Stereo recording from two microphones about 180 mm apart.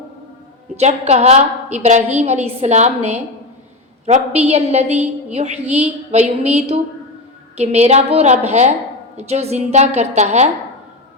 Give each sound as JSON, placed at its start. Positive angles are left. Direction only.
{"t": 0.8, "sound": "a woman's voice", "side_deg": -40}
{"t": 7.6, "sound": "a woman's voice", "side_deg": -35}